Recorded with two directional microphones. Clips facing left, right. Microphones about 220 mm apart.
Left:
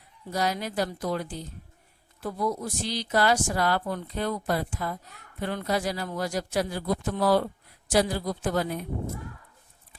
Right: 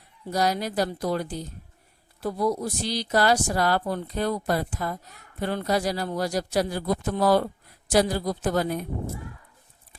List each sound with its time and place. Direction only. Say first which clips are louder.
0.3 s speech: right 3 dB; 40° right (ahead or behind)